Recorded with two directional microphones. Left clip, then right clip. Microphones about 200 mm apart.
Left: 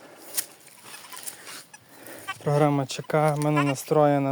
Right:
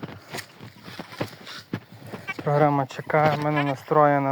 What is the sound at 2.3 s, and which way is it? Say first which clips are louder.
Speech: right 2 dB; 20° left (ahead or behind).